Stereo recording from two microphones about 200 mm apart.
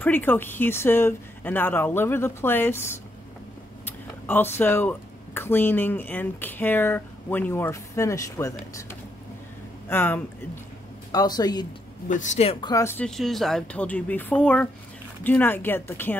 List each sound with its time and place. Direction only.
0.0 s speech: 10° left (ahead or behind)
9.8 s speech: 10° left (ahead or behind)
12.1 s speech: 40° left (ahead or behind); by 16.2 s 10° left (ahead or behind)